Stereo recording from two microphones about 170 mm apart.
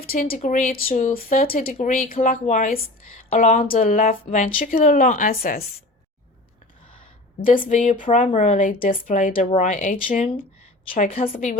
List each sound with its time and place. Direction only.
0.1 s speech: 60° left (ahead or behind)
0.3 s speech: 45° left (ahead or behind)
7.4 s speech: 55° left (ahead or behind)
11.2 s a woman's voice: 40° left (ahead or behind)